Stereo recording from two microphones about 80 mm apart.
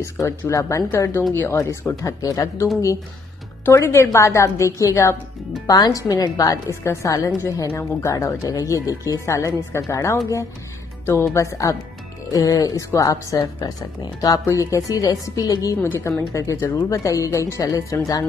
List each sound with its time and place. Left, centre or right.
0.0 s a woman's voice: left
3.6 s speech: left
5.7 s a woman's voice: left
15.8 s a woman's voice: left